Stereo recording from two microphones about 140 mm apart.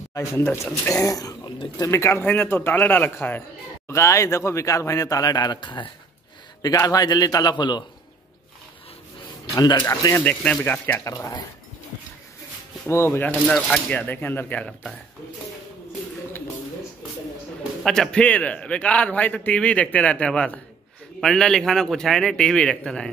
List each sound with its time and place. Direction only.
0.3 s speech: 20° left (ahead or behind)
9.6 s speech: 30° left (ahead or behind)
10.2 s a man's voice: 10° left (ahead or behind)
12.8 s a man's voice: 20° left (ahead or behind)
13.5 s a man's voice: 5° left (ahead or behind)
17.8 s a man's voice: 5° left (ahead or behind)